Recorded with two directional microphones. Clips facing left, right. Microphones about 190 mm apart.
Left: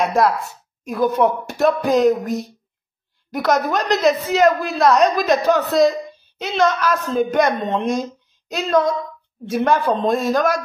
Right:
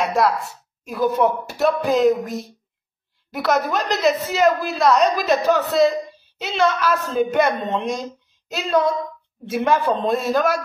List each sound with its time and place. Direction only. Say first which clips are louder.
0.1 s a woman's voice: left 2 dB; centre (ahead or behind)
6.5 s speech: left 1 dB; 45° left (ahead or behind)
6.9 s a woman's voice: left 1 dB; 5° right (ahead or behind)
10.0 s speech: left 2 dB; 45° left (ahead or behind)
10.3 s a woman's voice: left 1 dB; 5° right (ahead or behind)